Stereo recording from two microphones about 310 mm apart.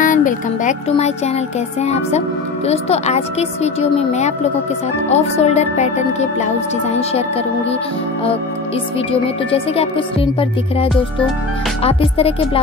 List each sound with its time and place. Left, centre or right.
0.0 s music: left
1.8 s speech: left
9.5 s speech: centre
11.8 s speech: centre